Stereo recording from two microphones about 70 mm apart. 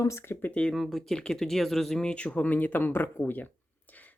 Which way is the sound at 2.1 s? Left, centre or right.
Centre.